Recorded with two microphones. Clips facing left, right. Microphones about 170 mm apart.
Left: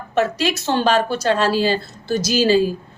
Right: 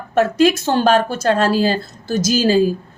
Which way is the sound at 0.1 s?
50° right (ahead or behind).